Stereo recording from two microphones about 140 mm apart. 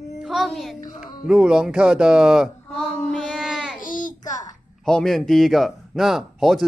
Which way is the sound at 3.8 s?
70° left (ahead or behind).